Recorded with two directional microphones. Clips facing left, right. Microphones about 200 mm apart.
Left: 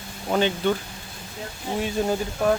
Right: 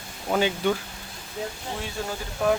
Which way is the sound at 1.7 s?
15° left (ahead or behind).